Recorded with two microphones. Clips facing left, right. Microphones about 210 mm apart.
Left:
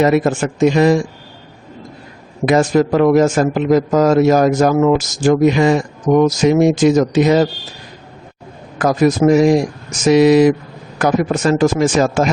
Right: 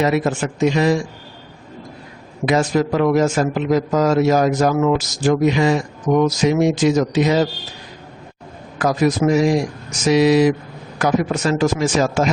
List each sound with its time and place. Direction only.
0.0 s a man's voice: 50° left (ahead or behind)
2.5 s a man's voice: 50° left (ahead or behind)
8.8 s a man's voice: 50° left (ahead or behind)